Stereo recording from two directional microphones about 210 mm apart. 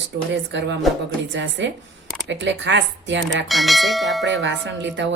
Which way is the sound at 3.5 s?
Centre (ahead or behind).